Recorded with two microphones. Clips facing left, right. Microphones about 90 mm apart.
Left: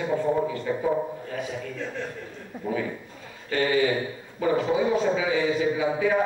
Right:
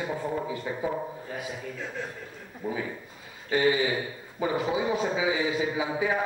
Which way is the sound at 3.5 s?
15° right (ahead or behind).